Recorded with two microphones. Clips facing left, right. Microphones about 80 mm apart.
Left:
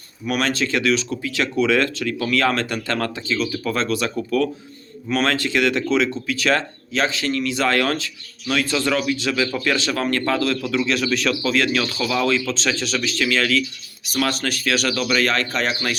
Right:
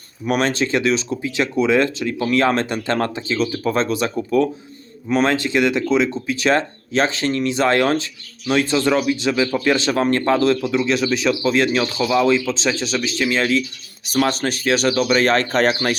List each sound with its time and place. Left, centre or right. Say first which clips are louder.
0.3 s speech: right 3 dB; right